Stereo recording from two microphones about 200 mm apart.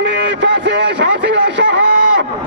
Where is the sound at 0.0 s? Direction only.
60° right (ahead or behind).